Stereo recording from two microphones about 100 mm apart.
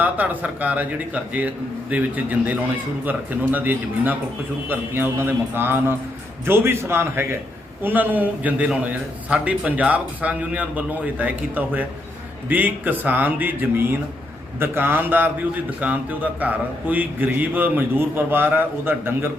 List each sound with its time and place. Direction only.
0.0 s a man's voice: 15° right (ahead or behind)